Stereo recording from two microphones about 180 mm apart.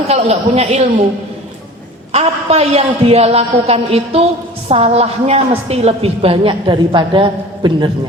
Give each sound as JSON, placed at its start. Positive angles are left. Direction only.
{"t": 0.1, "sound": "a woman's voice", "side_deg": -35}
{"t": 2.1, "sound": "a woman's voice", "side_deg": -35}